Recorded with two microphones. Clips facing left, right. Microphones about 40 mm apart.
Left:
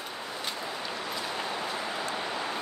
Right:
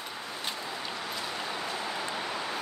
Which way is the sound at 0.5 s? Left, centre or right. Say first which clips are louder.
Left 1 dB; centre.